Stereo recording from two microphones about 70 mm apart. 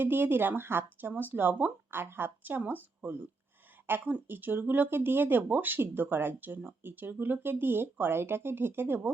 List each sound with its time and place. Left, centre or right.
0.0 s speech: right